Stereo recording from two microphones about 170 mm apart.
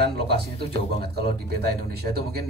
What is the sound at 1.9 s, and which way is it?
Speech, 70° right (ahead or behind).